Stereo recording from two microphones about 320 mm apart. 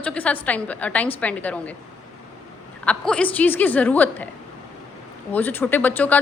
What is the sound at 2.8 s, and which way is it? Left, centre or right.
A woman's voice, centre.